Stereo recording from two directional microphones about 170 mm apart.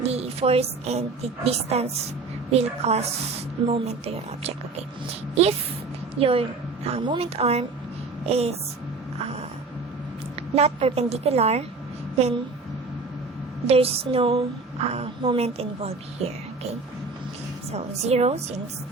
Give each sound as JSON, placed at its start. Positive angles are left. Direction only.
{"t": 0.0, "sound": "a woman's voice", "side_deg": -35}
{"t": 9.1, "sound": "a sound", "side_deg": -40}
{"t": 10.5, "sound": "a woman's voice", "side_deg": -35}
{"t": 13.7, "sound": "a woman's voice", "side_deg": -35}
{"t": 17.7, "sound": "a woman's voice", "side_deg": -40}